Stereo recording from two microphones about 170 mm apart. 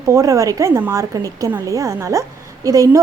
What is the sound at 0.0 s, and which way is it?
Speech, 20° right (ahead or behind).